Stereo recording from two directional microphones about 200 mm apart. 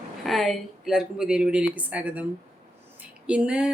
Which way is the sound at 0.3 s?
Centre (ahead or behind).